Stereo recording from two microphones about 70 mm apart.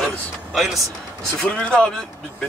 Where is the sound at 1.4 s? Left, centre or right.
Centre.